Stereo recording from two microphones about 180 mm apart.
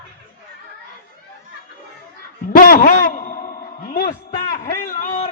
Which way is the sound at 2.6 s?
50° left (ahead or behind).